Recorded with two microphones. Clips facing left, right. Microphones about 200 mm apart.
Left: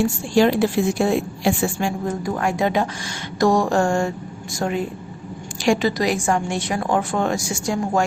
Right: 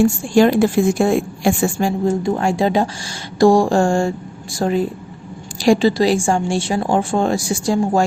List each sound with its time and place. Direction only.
0.0 s a woman's voice: 50° right (ahead or behind)
2.0 s a woman's voice: 25° right (ahead or behind)